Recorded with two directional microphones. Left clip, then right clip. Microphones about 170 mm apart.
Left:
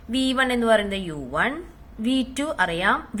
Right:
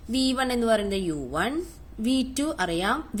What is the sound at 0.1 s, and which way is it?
A woman's voice, 55° right (ahead or behind).